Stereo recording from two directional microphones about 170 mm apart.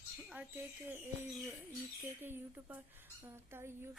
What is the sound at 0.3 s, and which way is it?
Speech, 10° right (ahead or behind).